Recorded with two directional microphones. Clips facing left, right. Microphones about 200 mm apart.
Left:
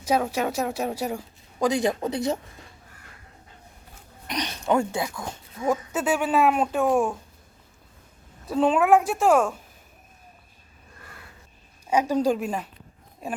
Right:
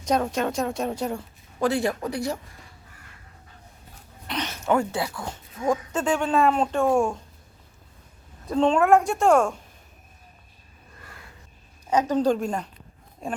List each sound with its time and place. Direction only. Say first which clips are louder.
0.0 s speech: even; 5° left (ahead or behind); by 2.4 s 20° left (ahead or behind)
4.3 s speech: even; 15° left (ahead or behind)
5.2 s speech: even; 10° left (ahead or behind)
8.4 s a woman's voice: right 1 dB; 5° left (ahead or behind)
11.9 s speech: right 1 dB; 10° left (ahead or behind)